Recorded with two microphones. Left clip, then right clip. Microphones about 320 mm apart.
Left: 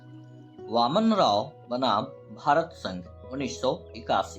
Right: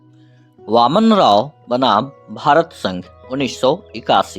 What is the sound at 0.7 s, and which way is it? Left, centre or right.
Speech, right.